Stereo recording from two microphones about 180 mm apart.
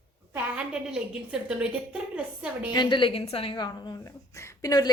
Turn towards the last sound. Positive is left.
turn(degrees=20)  # may be behind; listen again after turning